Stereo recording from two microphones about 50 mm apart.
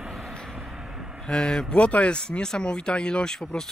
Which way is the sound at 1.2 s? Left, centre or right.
Centre.